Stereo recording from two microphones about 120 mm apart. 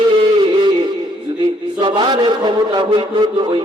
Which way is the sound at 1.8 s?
40° right (ahead or behind).